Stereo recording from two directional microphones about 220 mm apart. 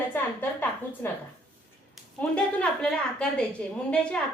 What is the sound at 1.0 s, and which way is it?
A woman's voice, 10° left (ahead or behind).